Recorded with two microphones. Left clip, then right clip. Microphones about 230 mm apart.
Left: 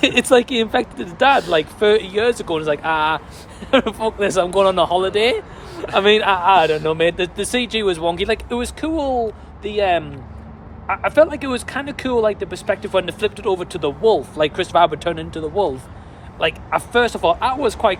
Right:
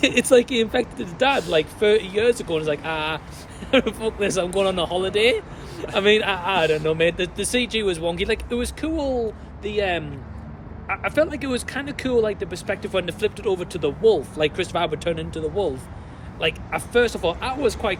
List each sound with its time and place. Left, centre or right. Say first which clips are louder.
0.0 s speech: left 3 dB; centre